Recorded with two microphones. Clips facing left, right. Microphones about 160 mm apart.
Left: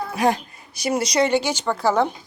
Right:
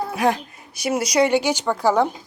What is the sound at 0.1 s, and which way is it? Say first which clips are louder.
A woman's voice: left 3 dB; centre (ahead or behind).